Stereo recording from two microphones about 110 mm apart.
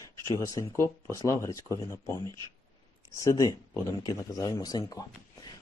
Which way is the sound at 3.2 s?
30° left (ahead or behind).